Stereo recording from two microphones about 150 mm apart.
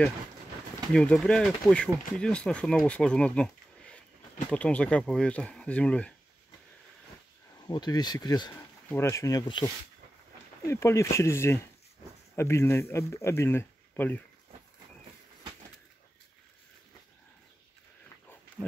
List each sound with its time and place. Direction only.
0.9 s speech: 5° left (ahead or behind)
7.6 s speech: 25° left (ahead or behind)
8.8 s speech: 15° left (ahead or behind); by 9.7 s 30° left (ahead or behind)
10.7 s speech: 20° left (ahead or behind)